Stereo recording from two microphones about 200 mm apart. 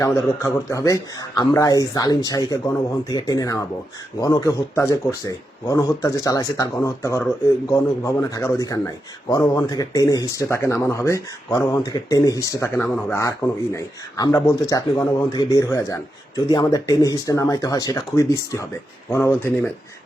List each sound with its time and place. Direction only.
0.0 s speech: 15° left (ahead or behind)